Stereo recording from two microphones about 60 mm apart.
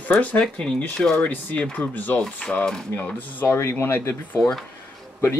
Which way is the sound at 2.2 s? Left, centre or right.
Centre.